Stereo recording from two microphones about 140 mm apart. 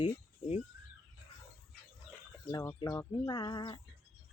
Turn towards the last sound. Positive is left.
turn(degrees=30)  # may be behind; listen again after turning